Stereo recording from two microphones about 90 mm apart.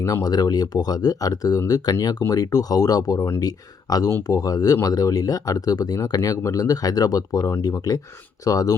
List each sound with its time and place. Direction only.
0.0 s speech: 40° left (ahead or behind)